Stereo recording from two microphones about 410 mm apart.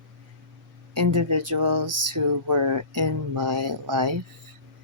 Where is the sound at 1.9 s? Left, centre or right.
Right.